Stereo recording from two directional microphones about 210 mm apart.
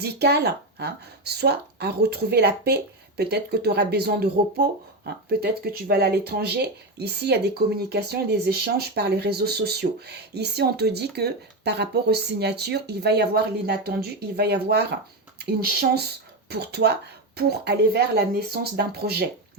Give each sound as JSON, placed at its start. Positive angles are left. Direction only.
{"t": 0.0, "sound": "speech", "side_deg": -50}